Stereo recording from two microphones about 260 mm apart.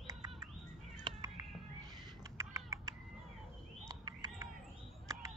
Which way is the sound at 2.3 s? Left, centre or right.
Centre.